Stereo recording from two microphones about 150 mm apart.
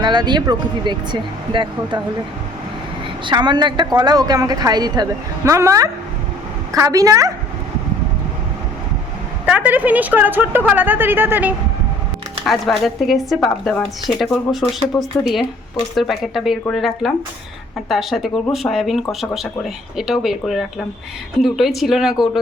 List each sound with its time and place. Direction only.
0.0 s speech: 30° right (ahead or behind)
3.2 s speech: 30° right (ahead or behind)
9.5 s a woman's voice: 10° right (ahead or behind)
12.5 s speech: centre (ahead or behind)